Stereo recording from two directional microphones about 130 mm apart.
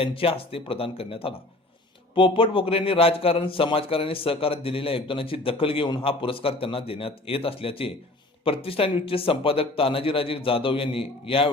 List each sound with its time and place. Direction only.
0.0 s a man's voice: 45° left (ahead or behind)